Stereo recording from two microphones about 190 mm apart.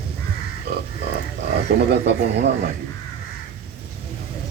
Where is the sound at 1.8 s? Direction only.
65° right (ahead or behind).